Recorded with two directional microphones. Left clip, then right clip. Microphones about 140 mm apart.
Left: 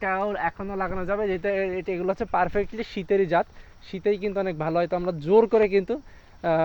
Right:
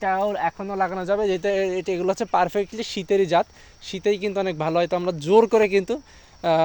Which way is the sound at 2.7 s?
25° right (ahead or behind).